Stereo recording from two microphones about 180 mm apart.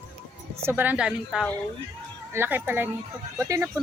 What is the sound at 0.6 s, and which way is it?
Speech, 10° right (ahead or behind).